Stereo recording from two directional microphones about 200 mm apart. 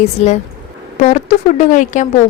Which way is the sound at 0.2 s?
35° left (ahead or behind).